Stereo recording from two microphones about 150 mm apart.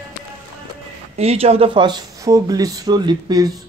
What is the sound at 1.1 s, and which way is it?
Speech, 45° right (ahead or behind).